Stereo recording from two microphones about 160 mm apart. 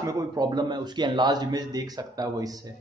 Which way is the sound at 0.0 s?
20° right (ahead or behind).